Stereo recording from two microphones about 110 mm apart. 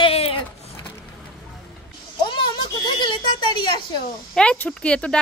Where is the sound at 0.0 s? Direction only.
60° left (ahead or behind).